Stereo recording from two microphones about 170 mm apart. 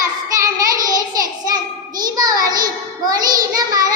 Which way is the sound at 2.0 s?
25° right (ahead or behind).